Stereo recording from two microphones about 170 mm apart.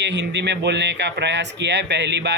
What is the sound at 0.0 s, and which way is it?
Speech, 90° right.